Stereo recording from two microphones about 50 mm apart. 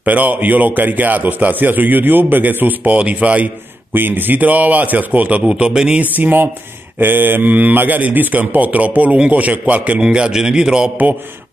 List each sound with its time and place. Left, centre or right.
0.0 s a man's voice: right
3.9 s a man's voice: right
5.5 s speech: centre
6.1 s a man's voice: right
10.0 s a man's voice: centre